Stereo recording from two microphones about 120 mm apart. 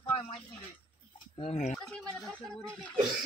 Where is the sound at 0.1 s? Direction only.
50° left (ahead or behind).